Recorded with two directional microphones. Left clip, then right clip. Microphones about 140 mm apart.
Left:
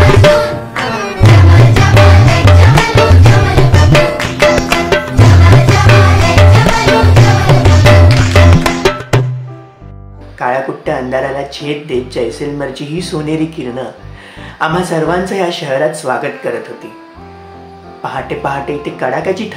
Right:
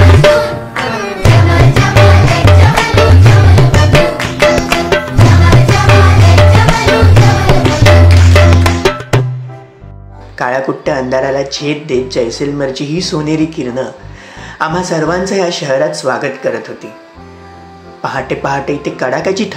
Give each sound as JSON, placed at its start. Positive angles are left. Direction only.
{"t": 0.0, "sound": "tabla", "side_deg": 0}
{"t": 7.8, "sound": "music", "side_deg": 0}
{"t": 10.4, "sound": "a woman's voice", "side_deg": -30}
{"t": 18.0, "sound": "speech", "side_deg": -20}